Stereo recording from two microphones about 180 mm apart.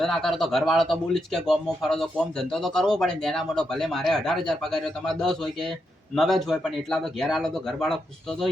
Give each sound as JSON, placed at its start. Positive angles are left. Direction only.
{"t": 0.0, "sound": "speech", "side_deg": 0}